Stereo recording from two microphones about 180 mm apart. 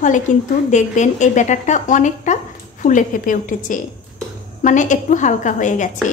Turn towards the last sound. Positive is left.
turn(degrees=45)  # may be behind; listen again after turning